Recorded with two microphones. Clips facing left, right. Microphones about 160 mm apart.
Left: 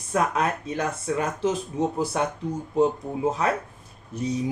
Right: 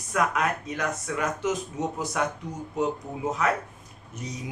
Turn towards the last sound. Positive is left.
turn(degrees=30)  # may be behind; listen again after turning